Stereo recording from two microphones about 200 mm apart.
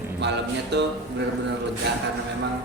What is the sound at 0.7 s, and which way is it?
Speech, 55° right (ahead or behind).